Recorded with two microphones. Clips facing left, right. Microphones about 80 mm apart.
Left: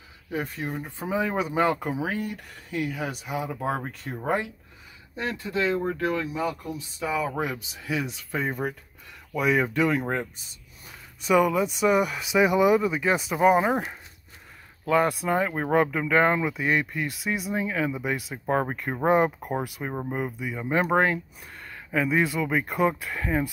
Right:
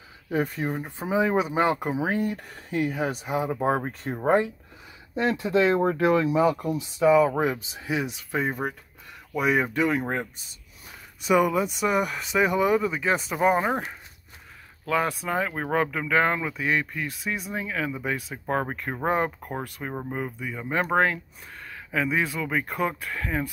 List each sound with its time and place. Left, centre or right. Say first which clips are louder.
0.3 s speech: right 4 dB; right
0.7 s speech: right 2 dB; right
2.0 s speech: right 4 dB; right
5.5 s speech: right 6 dB; right
6.7 s speech: right 8 dB; centre
7.2 s speech: right 7 dB; right; by 10.0 s centre
11.1 s speech: even; centre